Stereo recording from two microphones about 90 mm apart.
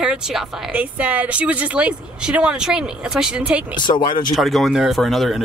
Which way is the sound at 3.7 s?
55° left (ahead or behind).